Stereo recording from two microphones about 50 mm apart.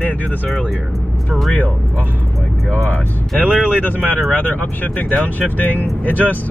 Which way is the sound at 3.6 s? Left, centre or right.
Left.